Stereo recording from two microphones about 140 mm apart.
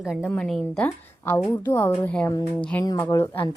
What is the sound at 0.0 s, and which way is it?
Speech, 5° right (ahead or behind).